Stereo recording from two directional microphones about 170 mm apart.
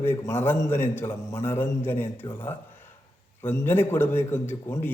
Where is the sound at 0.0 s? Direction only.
15° left (ahead or behind).